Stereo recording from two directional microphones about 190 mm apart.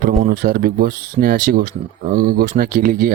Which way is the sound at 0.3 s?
45° right (ahead or behind).